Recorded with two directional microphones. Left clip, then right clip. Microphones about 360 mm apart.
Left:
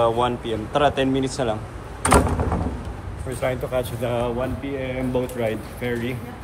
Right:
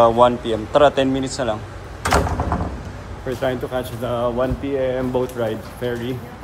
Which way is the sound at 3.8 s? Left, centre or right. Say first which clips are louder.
Right 1 dB; centre.